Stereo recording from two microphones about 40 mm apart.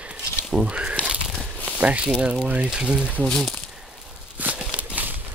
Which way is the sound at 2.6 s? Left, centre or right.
Right.